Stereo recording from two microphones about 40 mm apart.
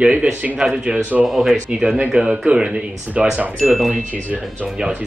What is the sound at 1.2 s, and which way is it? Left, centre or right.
Speech, centre.